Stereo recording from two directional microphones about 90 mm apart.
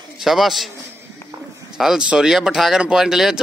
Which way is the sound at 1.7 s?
5° right (ahead or behind).